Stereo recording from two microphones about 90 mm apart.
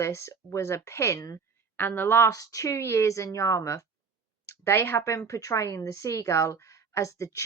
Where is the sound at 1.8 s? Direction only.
25° left (ahead or behind).